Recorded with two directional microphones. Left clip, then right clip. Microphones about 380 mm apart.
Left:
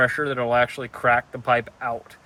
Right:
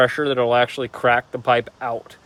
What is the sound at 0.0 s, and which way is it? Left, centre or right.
Speech, right.